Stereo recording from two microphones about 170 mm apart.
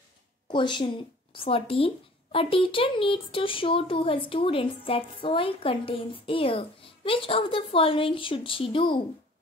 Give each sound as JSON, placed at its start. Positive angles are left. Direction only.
{"t": 0.5, "sound": "a woman's voice", "side_deg": 30}